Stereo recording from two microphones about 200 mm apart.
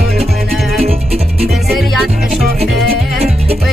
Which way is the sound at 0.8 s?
30° right (ahead or behind).